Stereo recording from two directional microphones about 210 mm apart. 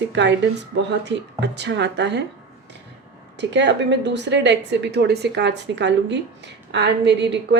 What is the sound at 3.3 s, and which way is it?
A woman's voice, 55° right (ahead or behind).